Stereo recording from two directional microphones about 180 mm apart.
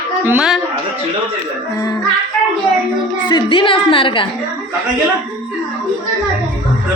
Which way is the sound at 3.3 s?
25° left (ahead or behind).